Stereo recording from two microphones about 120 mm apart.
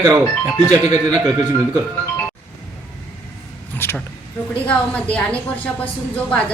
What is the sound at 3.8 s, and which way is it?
A woman's voice, 20° left (ahead or behind).